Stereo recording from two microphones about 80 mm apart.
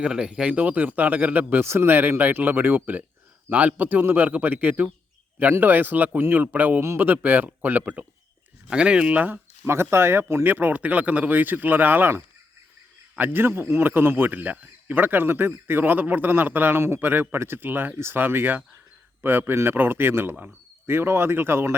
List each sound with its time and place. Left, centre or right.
0.0 s a man's voice: centre; by 10.5 s right
10.5 s a man's voice: right
20.3 s speech: centre
20.8 s a man's voice: right